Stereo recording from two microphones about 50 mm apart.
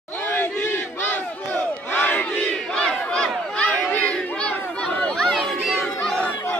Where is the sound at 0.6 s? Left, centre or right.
Left; by 3.6 s centre.